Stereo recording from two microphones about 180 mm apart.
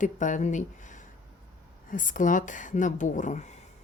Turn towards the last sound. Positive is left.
turn(degrees=45)  # may be behind; listen again after turning